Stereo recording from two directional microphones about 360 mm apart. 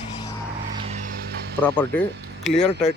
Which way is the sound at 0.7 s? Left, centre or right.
Centre.